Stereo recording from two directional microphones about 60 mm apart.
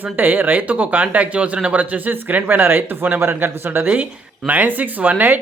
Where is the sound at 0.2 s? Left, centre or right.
Right.